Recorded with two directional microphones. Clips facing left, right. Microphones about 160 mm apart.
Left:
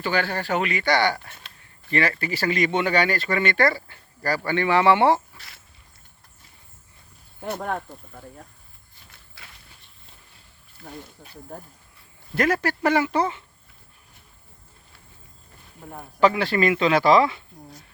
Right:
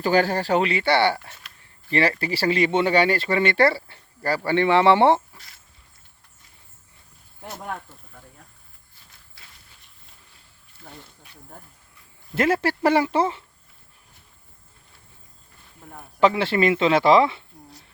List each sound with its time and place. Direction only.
0.0 s speech: 40° right (ahead or behind)
7.4 s speech: 60° left (ahead or behind)
9.4 s walk: 70° left (ahead or behind)
12.3 s speech: 25° right (ahead or behind)
16.2 s speech: 25° right (ahead or behind)